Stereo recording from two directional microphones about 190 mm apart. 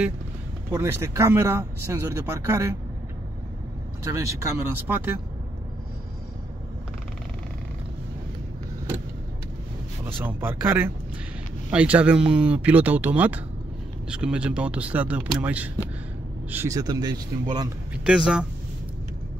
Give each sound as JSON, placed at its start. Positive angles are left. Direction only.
{"t": 0.7, "sound": "speech", "side_deg": -15}
{"t": 4.0, "sound": "speech", "side_deg": -15}
{"t": 10.2, "sound": "speech", "side_deg": -10}
{"t": 18.0, "sound": "speech", "side_deg": -5}